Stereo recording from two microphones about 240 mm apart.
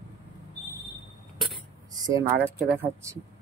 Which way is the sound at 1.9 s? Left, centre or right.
Centre.